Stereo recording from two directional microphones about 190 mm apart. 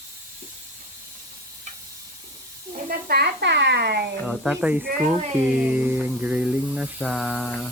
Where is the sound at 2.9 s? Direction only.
55° right (ahead or behind).